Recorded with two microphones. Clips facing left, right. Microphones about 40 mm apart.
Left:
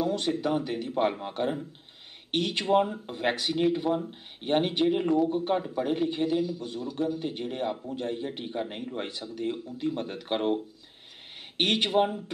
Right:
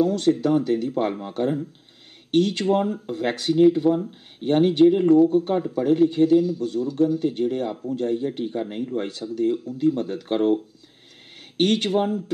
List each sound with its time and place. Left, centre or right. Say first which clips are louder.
0.0 s speech: right 8 dB; left
5.3 s speech: right 6 dB; left